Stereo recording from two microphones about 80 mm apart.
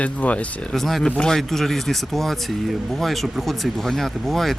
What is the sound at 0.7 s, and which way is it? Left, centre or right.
Speech, centre.